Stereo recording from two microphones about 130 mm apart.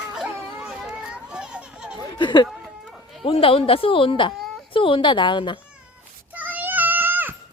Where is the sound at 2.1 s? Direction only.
35° left (ahead or behind).